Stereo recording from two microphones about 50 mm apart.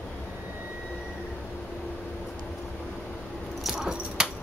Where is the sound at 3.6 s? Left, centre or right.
Centre.